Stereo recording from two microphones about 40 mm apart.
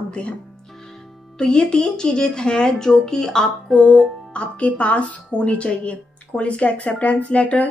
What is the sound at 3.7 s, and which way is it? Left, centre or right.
A woman's voice, left.